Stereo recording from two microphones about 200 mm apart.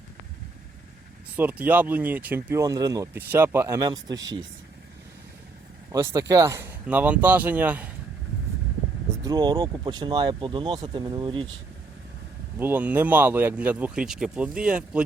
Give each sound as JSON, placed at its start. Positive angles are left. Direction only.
{"t": 1.4, "sound": "speech", "side_deg": -10}
{"t": 5.9, "sound": "speech", "side_deg": -15}
{"t": 9.2, "sound": "speech", "side_deg": -20}
{"t": 12.5, "sound": "speech", "side_deg": -10}